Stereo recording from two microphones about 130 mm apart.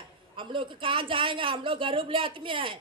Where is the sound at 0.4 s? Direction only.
40° right (ahead or behind).